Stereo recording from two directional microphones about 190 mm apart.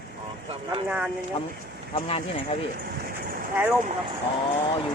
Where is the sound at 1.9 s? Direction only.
30° left (ahead or behind).